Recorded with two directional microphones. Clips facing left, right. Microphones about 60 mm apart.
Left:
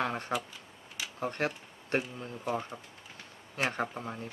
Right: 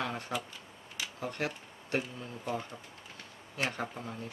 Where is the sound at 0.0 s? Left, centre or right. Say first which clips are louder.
Left 3 dB; left.